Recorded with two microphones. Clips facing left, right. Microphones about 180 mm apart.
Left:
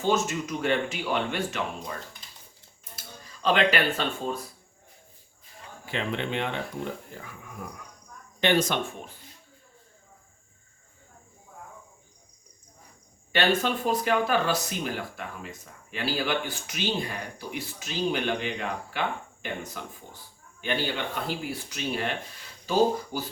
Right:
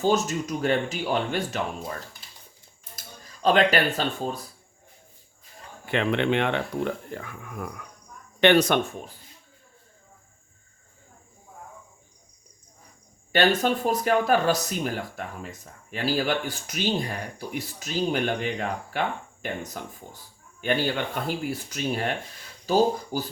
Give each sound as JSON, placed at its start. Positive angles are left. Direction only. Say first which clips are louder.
{"t": 0.0, "sound": "speech", "louder": "right 2 dB", "side_deg": -40}
{"t": 3.4, "sound": "speech", "louder": "right 3 dB", "side_deg": -40}
{"t": 5.8, "sound": "speech", "louder": "right 7 dB", "side_deg": -65}
{"t": 13.3, "sound": "speech", "louder": "right 3 dB", "side_deg": -45}